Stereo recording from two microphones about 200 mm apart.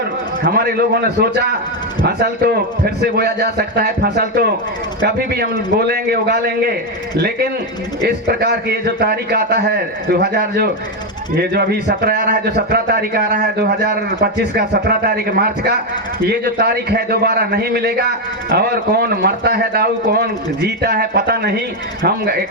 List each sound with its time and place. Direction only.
0.5 s a man's voice: 50° right (ahead or behind)